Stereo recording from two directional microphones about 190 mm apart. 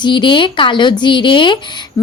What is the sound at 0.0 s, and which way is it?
A woman's voice, 25° left (ahead or behind).